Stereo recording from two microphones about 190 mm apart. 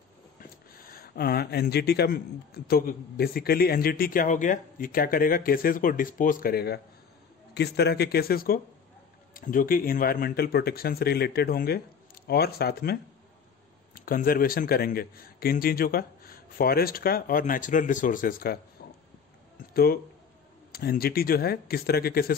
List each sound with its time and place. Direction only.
0.4 s speech: 50° left (ahead or behind)
19.6 s a sound: 50° left (ahead or behind)
20.7 s speech: 55° left (ahead or behind)